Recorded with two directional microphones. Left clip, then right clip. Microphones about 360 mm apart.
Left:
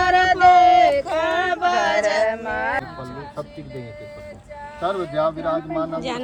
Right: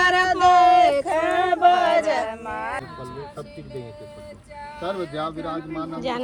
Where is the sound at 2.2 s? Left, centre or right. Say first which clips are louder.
Left 7 dB; left.